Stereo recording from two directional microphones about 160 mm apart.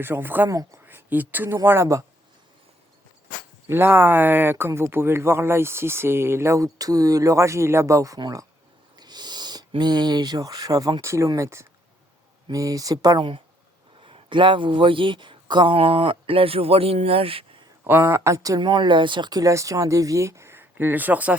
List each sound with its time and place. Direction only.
0.0 s speech: 15° right (ahead or behind)
3.7 s speech: 15° right (ahead or behind); by 17.6 s 35° right (ahead or behind)
17.8 s speech: 15° right (ahead or behind)